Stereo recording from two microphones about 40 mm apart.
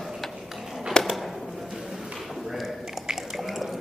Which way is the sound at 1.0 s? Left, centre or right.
Centre.